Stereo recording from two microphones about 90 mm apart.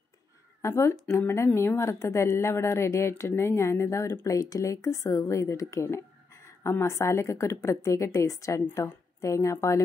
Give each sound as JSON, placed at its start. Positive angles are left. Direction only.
{"t": 0.6, "sound": "a woman's voice", "side_deg": 30}